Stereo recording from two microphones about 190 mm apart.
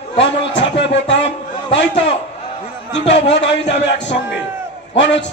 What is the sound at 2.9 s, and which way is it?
Speech, 65° left (ahead or behind).